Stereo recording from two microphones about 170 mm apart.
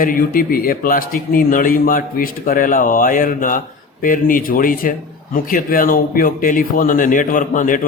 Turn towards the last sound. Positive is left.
turn(degrees=50)  # may be behind; listen again after turning